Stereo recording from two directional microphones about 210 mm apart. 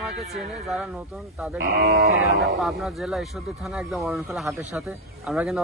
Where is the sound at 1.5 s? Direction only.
50° right (ahead or behind).